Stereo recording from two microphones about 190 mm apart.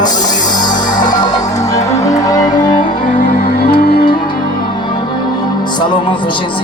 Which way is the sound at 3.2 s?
50° left (ahead or behind).